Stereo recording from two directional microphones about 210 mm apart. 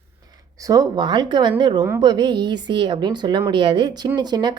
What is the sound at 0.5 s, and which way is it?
A woman's voice, 15° right (ahead or behind).